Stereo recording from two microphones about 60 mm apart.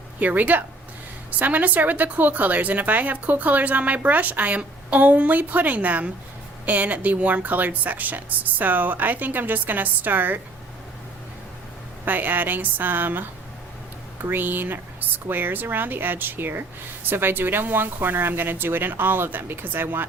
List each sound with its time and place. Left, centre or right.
0.2 s speech: right
12.0 s speech: right